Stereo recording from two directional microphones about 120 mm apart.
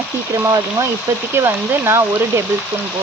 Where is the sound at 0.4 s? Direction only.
30° right (ahead or behind).